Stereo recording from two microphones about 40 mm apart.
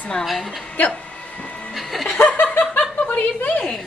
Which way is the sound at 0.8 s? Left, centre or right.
Left.